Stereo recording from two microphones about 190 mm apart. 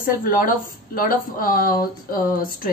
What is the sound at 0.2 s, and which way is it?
Speech, 45° left (ahead or behind).